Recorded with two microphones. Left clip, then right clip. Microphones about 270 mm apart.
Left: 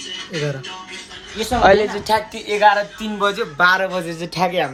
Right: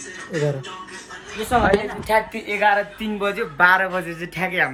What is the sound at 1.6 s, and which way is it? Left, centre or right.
Speech, centre.